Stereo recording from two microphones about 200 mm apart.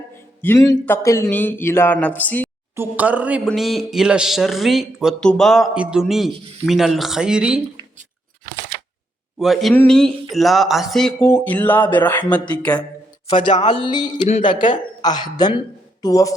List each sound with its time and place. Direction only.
0.4 s speech: 10° left (ahead or behind)
2.7 s speech: 10° right (ahead or behind)
9.4 s speech: centre (ahead or behind)
11.2 s speech: 10° left (ahead or behind)
13.3 s a man's voice: 25° left (ahead or behind)